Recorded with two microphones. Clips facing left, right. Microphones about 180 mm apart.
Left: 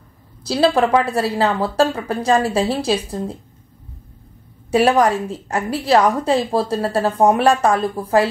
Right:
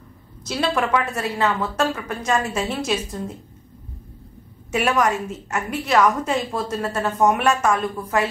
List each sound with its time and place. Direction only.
0.4 s a woman's voice: 30° left (ahead or behind)
4.6 s a woman's voice: 35° left (ahead or behind)